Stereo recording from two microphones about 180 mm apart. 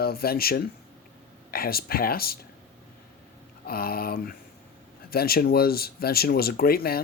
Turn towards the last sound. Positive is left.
turn(degrees=55)  # may be behind; listen again after turning